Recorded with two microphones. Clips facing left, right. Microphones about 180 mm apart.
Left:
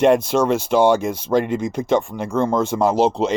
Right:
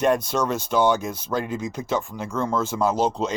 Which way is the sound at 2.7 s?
45° left (ahead or behind).